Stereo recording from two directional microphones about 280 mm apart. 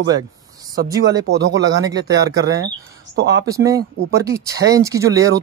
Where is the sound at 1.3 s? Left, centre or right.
Right.